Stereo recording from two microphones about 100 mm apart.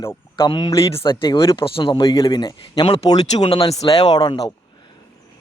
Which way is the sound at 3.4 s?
65° left (ahead or behind).